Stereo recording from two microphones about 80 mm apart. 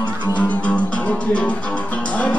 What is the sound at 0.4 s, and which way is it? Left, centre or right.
Music, centre.